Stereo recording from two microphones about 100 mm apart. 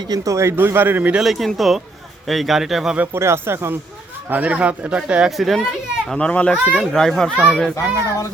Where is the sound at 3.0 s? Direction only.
25° right (ahead or behind).